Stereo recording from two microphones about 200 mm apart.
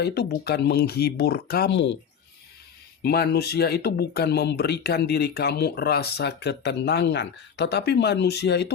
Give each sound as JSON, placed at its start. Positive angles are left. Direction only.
{"t": 0.0, "sound": "speech", "side_deg": 55}
{"t": 3.0, "sound": "speech", "side_deg": 55}